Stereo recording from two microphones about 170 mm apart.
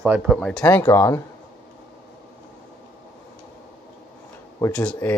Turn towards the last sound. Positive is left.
turn(degrees=10)  # may be behind; listen again after turning